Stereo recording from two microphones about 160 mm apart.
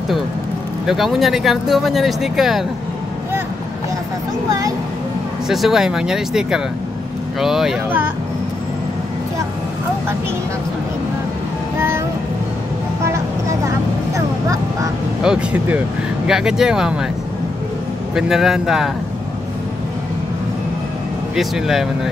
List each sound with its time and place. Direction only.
0.8 s speech: centre (ahead or behind)
4.5 s speech: 20° right (ahead or behind)
5.5 s speech: centre (ahead or behind)
13.0 s vehicle: 20° right (ahead or behind)
15.2 s speech: 10° right (ahead or behind)
18.1 s speech: centre (ahead or behind)
21.4 s speech: centre (ahead or behind)